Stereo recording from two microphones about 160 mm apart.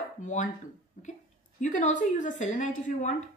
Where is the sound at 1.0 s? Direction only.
55° left (ahead or behind).